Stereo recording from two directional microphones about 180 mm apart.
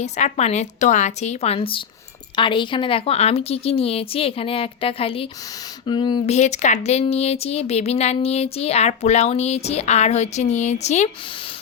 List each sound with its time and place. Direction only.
0.0 s speech: 40° left (ahead or behind)
6.2 s speech: 40° left (ahead or behind)